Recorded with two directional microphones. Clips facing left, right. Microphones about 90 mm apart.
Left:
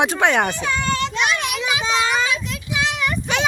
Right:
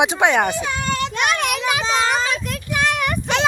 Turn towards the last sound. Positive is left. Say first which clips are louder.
# right 2 dB
turn(degrees=-55)  # may be behind; listen again after turning